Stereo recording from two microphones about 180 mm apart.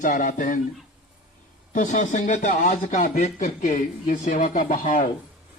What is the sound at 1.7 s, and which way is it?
A man's voice, 45° left (ahead or behind).